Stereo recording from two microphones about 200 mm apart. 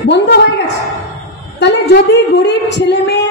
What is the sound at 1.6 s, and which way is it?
A woman's voice, 60° left (ahead or behind).